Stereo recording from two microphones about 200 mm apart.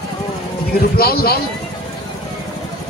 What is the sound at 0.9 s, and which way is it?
Speech, 50° left (ahead or behind).